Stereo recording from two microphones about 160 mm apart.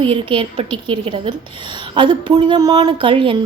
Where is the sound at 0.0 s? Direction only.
30° right (ahead or behind).